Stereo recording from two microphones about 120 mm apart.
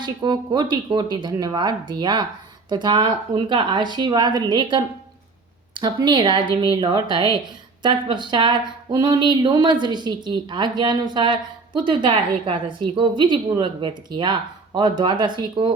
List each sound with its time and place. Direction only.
0.0 s speech: 40° right (ahead or behind)